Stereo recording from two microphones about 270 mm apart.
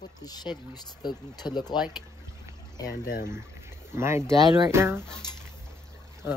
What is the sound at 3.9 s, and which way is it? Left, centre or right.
Speech, centre.